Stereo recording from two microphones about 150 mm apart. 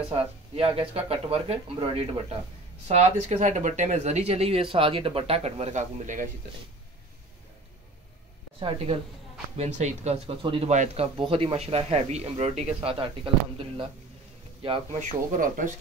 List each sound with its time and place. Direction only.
0.1 s speech: 40° right (ahead or behind); by 6.2 s 55° right (ahead or behind)
8.5 s speech: 40° right (ahead or behind)
9.6 s speech: 50° right (ahead or behind)
10.7 s speech: 50° right (ahead or behind)
11.1 s speech: 40° right (ahead or behind)
14.6 s speech: 35° right (ahead or behind)
15.0 s speech: 65° right (ahead or behind)